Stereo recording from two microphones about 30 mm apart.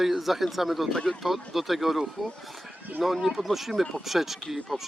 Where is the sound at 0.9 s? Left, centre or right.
Left.